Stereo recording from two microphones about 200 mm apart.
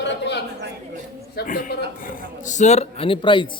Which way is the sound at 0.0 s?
60° left (ahead or behind).